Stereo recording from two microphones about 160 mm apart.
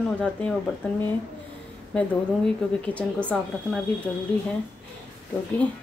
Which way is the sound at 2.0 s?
10° left (ahead or behind).